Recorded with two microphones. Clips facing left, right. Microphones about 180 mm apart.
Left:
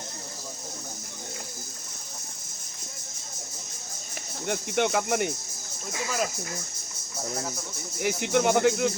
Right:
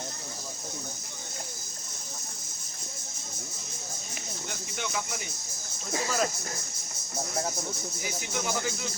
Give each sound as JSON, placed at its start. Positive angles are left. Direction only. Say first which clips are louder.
{"t": 4.4, "sound": "speech", "louder": "left 13 dB", "side_deg": 65}
{"t": 8.0, "sound": "speech", "louder": "left 11 dB", "side_deg": 65}